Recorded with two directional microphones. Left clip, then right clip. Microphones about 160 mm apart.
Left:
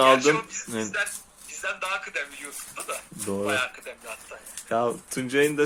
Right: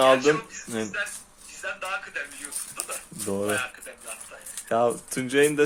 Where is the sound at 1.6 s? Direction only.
55° left (ahead or behind).